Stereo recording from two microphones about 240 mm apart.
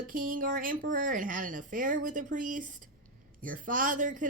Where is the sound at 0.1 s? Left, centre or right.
Right.